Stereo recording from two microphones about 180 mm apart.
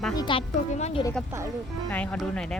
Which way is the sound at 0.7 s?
40° left (ahead or behind).